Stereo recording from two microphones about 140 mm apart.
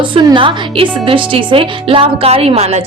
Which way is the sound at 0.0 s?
35° right (ahead or behind).